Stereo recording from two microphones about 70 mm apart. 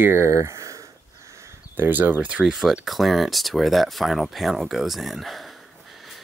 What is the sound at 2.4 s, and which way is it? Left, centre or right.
Speech, centre.